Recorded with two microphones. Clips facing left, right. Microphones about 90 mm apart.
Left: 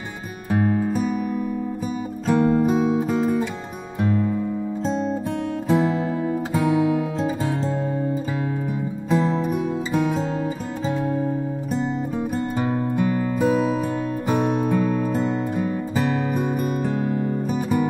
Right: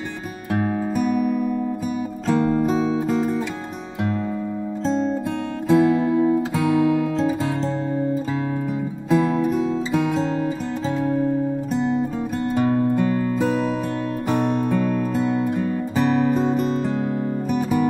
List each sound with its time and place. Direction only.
0.9 s music: 20° left (ahead or behind)
2.2 s music: 15° left (ahead or behind)
4.8 s music: 10° left (ahead or behind)
9.1 s music: 20° left (ahead or behind)
12.5 s music: 15° left (ahead or behind)